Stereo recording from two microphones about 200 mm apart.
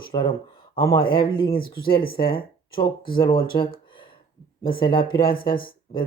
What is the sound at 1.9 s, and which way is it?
Speech, 50° left (ahead or behind).